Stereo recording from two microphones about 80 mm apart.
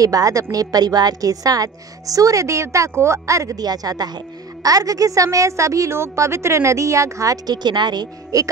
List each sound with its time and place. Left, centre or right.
0.0 s a woman's voice: right
7.4 s speech: right